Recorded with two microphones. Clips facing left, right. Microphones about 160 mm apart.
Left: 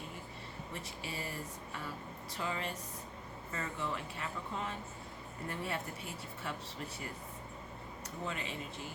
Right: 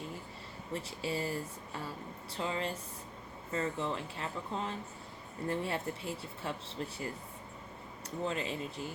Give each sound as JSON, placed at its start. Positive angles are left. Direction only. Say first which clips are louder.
{"t": 0.7, "sound": "speech", "louder": "right 9 dB", "side_deg": -30}
{"t": 8.2, "sound": "speech", "louder": "right 6 dB", "side_deg": -30}